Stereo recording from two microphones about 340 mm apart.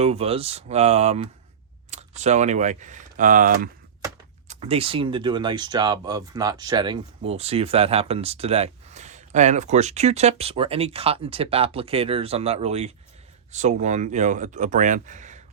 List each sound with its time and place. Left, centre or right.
0.0 s speech: centre